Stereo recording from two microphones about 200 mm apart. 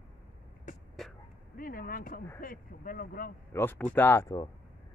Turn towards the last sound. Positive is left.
turn(degrees=15)  # may be behind; listen again after turning